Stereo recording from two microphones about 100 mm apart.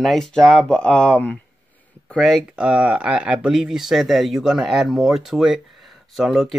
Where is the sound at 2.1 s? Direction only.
5° left (ahead or behind).